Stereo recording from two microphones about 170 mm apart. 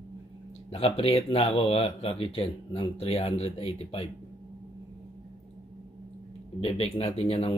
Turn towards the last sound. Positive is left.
turn(degrees=40)  # may be behind; listen again after turning